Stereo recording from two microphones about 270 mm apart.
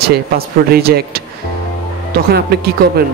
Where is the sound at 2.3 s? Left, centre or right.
Right.